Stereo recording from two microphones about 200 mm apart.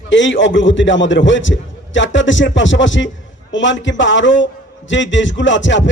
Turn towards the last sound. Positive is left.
turn(degrees=65)  # may be behind; listen again after turning